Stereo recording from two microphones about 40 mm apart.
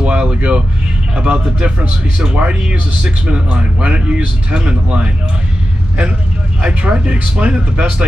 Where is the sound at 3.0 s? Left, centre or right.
Right.